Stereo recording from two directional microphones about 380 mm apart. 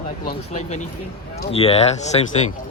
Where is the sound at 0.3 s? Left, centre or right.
Centre.